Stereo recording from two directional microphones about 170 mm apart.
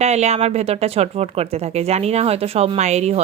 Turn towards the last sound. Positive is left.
turn(degrees=-40)  # may be behind; listen again after turning